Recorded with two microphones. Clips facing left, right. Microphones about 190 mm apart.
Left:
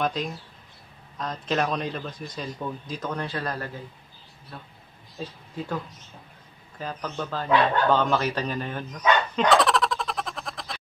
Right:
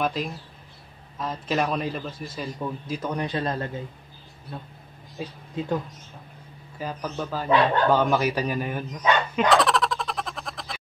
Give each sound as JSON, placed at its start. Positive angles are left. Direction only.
{"t": 0.0, "sound": "a man's voice", "side_deg": -5}
{"t": 5.2, "sound": "a man's voice", "side_deg": -15}
{"t": 6.8, "sound": "speech", "side_deg": -10}